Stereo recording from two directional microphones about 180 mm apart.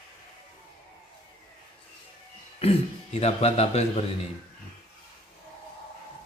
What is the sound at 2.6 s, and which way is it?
A man's voice, 35° left (ahead or behind).